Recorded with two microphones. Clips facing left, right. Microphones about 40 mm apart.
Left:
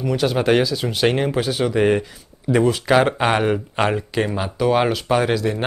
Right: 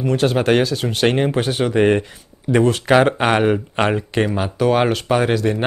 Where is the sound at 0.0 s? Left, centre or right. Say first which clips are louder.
Right 3 dB; right.